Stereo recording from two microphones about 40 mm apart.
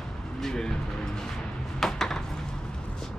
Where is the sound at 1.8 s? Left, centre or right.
Centre.